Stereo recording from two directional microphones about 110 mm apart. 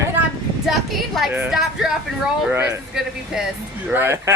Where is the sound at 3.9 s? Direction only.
20° right (ahead or behind).